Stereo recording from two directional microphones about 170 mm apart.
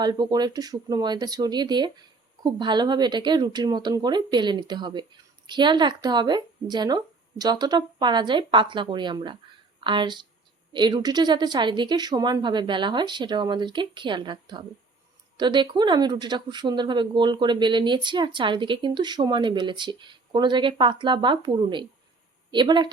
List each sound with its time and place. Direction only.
0.0 s speech: 25° right (ahead or behind)